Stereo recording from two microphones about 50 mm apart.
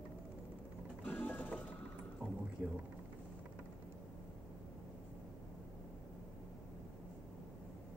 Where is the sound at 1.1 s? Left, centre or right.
Left.